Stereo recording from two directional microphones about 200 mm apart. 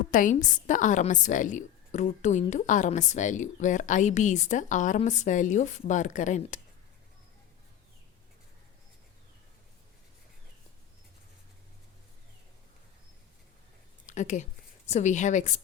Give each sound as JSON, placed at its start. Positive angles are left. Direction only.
{"t": 0.1, "sound": "a woman's voice", "side_deg": 40}
{"t": 14.1, "sound": "a woman's voice", "side_deg": 35}